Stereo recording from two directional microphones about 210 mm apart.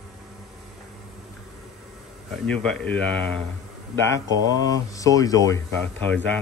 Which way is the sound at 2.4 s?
5° left (ahead or behind).